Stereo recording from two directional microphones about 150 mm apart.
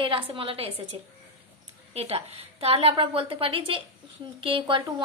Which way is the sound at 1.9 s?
45° right (ahead or behind).